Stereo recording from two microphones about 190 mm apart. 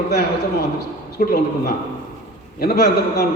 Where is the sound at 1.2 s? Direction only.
50° left (ahead or behind).